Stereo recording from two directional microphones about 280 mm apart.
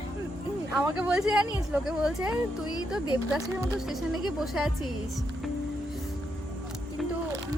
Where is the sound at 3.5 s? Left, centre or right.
Centre.